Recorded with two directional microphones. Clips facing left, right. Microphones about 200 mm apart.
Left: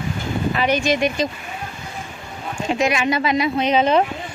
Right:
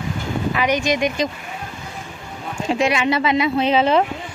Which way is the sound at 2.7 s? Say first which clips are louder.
Right 1 dB; 30° right (ahead or behind).